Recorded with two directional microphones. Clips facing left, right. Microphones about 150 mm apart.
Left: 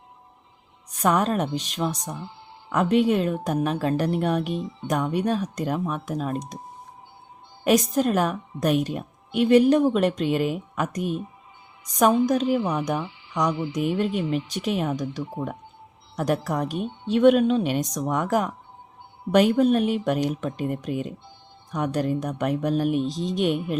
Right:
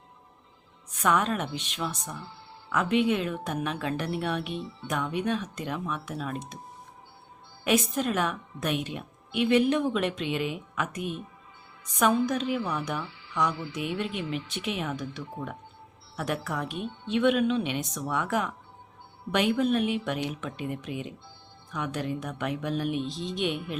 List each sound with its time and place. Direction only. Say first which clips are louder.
0.9 s a woman's voice: left 4 dB; 35° left (ahead or behind)
2.0 s music: left 5 dB; 15° left (ahead or behind)
2.7 s a woman's voice: left 5 dB; 40° left (ahead or behind)
7.6 s a woman's voice: left 6 dB; 40° left (ahead or behind)
12.5 s speech: left 6 dB; 15° left (ahead or behind)
13.0 s music: left 5 dB; 15° left (ahead or behind)
13.5 s speech: left 8 dB; 20° left (ahead or behind)
14.0 s a woman's voice: left 7 dB; 40° left (ahead or behind)
16.1 s a woman's voice: left 7 dB; 40° left (ahead or behind)